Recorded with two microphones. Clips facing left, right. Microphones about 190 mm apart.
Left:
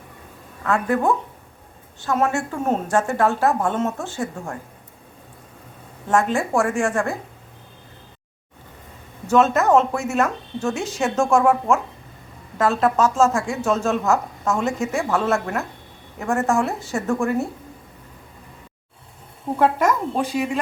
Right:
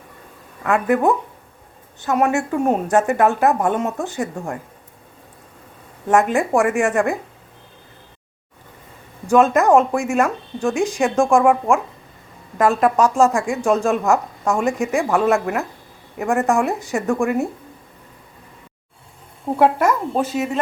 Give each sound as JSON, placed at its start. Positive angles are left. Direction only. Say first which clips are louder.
{"t": 0.6, "sound": "speech", "louder": "right 3 dB", "side_deg": -15}
{"t": 6.1, "sound": "speech", "louder": "right 3 dB", "side_deg": -15}
{"t": 9.2, "sound": "speech", "louder": "right 3 dB", "side_deg": -10}
{"t": 19.5, "sound": "a woman's voice", "louder": "right 2 dB", "side_deg": -10}